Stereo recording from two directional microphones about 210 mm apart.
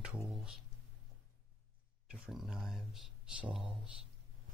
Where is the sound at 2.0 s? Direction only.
5° right (ahead or behind).